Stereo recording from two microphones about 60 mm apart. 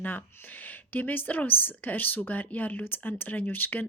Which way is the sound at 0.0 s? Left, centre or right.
Left.